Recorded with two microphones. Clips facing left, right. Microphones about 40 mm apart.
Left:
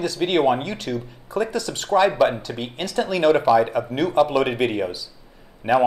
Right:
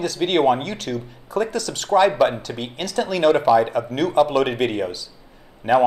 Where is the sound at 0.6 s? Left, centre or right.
Centre.